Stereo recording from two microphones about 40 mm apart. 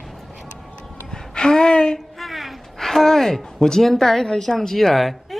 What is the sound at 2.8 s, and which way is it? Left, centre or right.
A woman's voice, centre.